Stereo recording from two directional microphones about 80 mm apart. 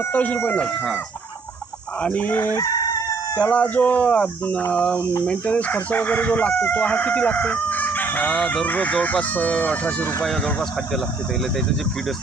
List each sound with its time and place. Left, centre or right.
0.1 s chicken: centre
2.0 s chicken: left
3.3 s speech: centre
4.7 s chicken: centre
9.1 s speech: centre